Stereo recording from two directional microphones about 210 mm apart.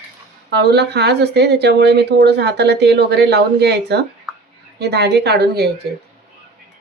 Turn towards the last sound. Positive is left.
turn(degrees=-50)  # may be behind; listen again after turning